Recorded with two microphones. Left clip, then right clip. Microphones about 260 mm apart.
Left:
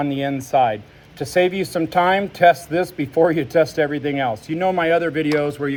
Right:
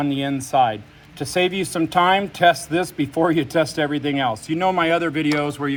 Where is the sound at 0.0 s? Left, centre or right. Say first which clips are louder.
Left 1 dB; right.